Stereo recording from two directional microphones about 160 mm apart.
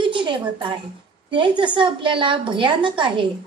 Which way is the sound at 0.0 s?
30° right (ahead or behind).